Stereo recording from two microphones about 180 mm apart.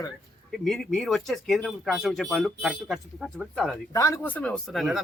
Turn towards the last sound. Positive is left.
turn(degrees=0)  # may be behind; listen again after turning